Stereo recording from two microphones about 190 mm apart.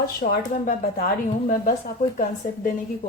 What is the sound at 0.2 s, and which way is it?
A woman's voice, 55° left (ahead or behind).